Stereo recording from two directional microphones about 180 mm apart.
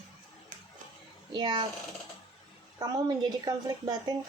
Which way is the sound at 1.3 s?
25° right (ahead or behind).